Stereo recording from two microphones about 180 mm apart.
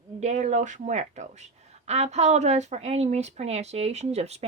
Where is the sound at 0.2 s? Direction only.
40° right (ahead or behind).